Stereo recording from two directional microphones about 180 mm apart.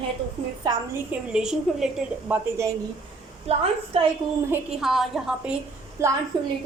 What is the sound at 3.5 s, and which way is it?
Speech, 35° right (ahead or behind).